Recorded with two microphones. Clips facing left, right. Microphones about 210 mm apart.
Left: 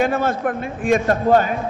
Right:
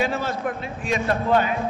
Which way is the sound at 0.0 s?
50° left (ahead or behind).